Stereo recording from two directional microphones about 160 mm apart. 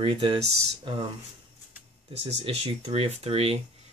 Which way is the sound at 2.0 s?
35° right (ahead or behind).